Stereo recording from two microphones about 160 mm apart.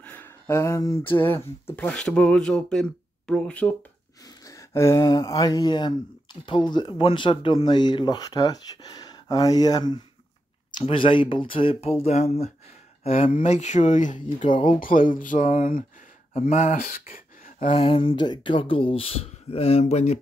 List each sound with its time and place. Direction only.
0.0 s speech: 10° left (ahead or behind)
4.2 s speech: 20° left (ahead or behind); by 15.8 s 55° left (ahead or behind)
16.3 s speech: 45° left (ahead or behind)
17.6 s speech: 35° left (ahead or behind)